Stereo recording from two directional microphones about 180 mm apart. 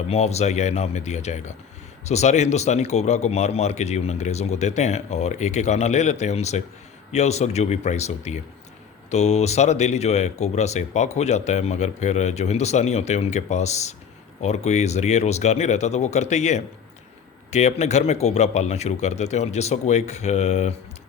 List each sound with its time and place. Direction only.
0.1 s speech: 35° left (ahead or behind)